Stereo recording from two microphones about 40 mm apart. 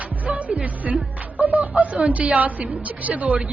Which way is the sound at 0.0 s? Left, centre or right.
Right.